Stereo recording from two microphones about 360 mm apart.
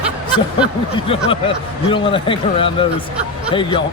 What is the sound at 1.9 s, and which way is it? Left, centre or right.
Speech, centre.